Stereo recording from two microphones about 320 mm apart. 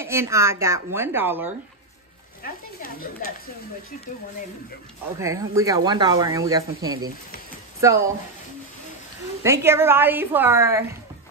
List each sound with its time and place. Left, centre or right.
0.0 s speech: centre
2.4 s speech: left
5.2 s speech: centre
9.4 s speech: centre